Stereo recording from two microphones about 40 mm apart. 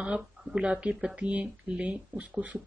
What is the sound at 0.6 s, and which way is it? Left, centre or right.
Speech, right.